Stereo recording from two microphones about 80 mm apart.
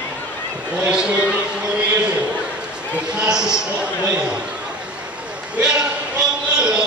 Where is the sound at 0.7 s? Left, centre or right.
Centre.